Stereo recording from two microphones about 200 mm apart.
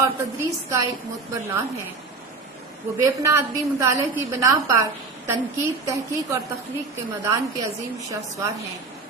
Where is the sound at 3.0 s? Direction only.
15° right (ahead or behind).